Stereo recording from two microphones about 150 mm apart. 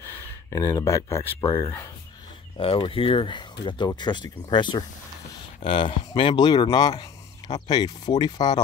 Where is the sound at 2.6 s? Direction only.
35° left (ahead or behind).